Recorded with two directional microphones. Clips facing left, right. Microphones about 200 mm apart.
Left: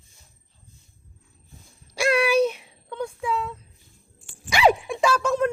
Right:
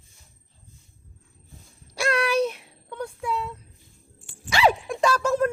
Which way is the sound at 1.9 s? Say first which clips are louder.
Left 3 dB; 5° left (ahead or behind).